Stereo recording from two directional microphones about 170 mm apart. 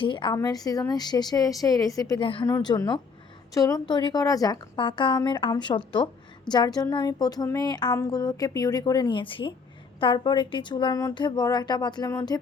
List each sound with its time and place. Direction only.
0.0 s a woman's voice: 30° left (ahead or behind)